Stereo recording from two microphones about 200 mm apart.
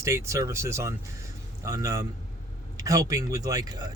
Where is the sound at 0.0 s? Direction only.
15° right (ahead or behind).